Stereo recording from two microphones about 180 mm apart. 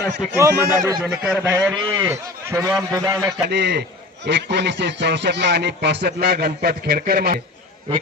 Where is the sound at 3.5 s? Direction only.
70° right (ahead or behind).